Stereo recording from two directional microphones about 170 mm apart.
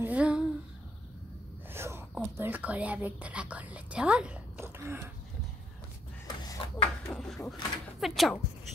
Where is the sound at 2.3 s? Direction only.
10° right (ahead or behind).